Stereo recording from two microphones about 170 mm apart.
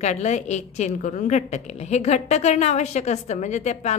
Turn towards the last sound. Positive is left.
turn(degrees=40)  # may be behind; listen again after turning